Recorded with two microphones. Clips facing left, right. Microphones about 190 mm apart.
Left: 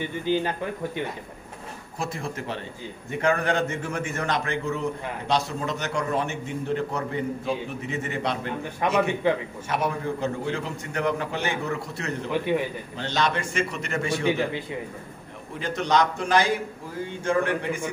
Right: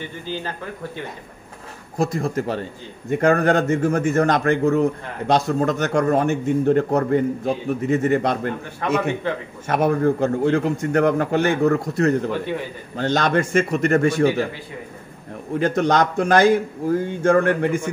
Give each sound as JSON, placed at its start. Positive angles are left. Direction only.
{"t": 0.0, "sound": "speech", "side_deg": 15}
{"t": 2.0, "sound": "a man's voice", "side_deg": -40}
{"t": 8.8, "sound": "speech", "side_deg": 15}
{"t": 9.7, "sound": "a man's voice", "side_deg": -50}
{"t": 15.6, "sound": "a man's voice", "side_deg": -50}